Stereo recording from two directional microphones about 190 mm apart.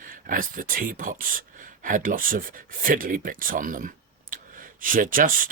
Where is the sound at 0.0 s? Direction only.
45° right (ahead or behind).